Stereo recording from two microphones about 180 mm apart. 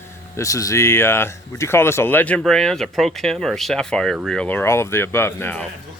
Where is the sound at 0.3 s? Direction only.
20° left (ahead or behind).